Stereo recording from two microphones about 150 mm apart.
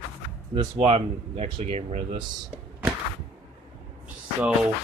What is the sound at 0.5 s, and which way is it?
Speech, 25° right (ahead or behind).